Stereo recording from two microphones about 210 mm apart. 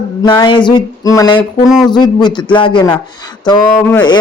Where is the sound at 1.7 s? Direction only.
Centre (ahead or behind).